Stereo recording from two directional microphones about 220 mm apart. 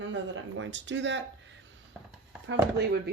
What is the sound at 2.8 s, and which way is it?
Speech, 50° right (ahead or behind).